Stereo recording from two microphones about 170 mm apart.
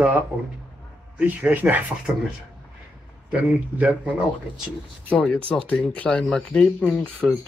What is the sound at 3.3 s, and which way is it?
Speech, 5° right (ahead or behind).